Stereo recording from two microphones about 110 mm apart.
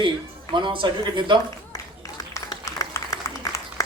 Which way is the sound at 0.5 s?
45° right (ahead or behind).